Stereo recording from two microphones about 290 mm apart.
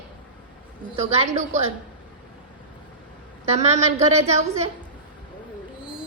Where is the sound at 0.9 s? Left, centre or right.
Right.